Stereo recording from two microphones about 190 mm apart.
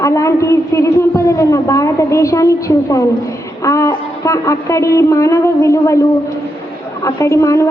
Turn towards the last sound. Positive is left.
turn(degrees=15)  # may be behind; listen again after turning